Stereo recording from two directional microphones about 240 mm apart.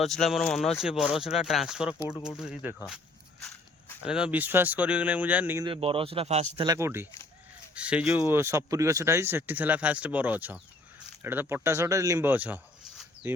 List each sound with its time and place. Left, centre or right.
0.0 s speech: centre
4.0 s speech: centre
5.6 s a man's voice: right
6.6 s speech: centre